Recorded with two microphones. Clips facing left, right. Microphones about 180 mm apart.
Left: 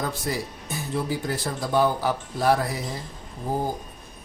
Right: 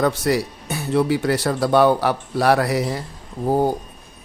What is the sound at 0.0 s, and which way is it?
Speech, 75° right (ahead or behind).